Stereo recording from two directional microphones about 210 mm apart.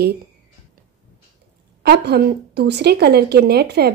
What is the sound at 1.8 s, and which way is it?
Speech, 50° right (ahead or behind).